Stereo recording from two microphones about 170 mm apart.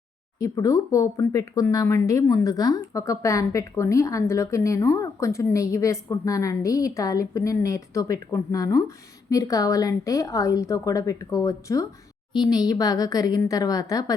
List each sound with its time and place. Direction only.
0.3 s speech: 20° left (ahead or behind)